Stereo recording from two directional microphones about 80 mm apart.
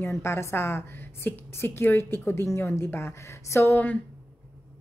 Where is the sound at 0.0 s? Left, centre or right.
Left.